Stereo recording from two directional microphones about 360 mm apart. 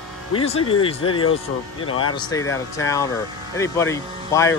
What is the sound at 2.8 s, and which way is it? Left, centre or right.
Speech, centre.